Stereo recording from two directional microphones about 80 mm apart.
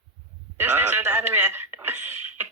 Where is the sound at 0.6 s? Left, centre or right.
Right.